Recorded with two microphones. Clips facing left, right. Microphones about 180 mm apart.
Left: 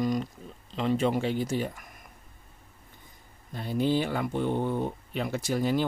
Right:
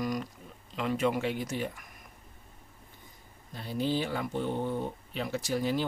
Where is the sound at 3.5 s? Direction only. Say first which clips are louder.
Left 4 dB; 50° left (ahead or behind).